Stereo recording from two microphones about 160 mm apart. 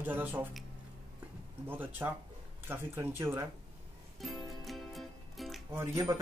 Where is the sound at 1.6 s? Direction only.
15° right (ahead or behind).